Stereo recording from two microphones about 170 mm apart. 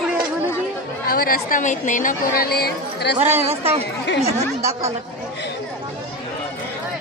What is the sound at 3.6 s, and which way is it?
Speech, 35° right (ahead or behind).